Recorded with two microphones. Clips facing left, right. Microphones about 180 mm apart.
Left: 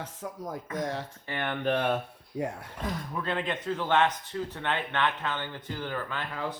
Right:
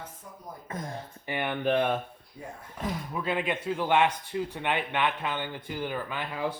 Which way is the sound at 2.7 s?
10° right (ahead or behind).